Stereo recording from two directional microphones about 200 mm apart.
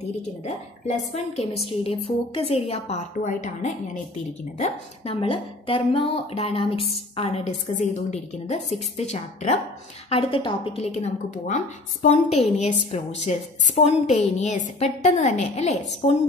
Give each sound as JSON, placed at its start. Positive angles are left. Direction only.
{"t": 0.8, "sound": "a woman's voice", "side_deg": 35}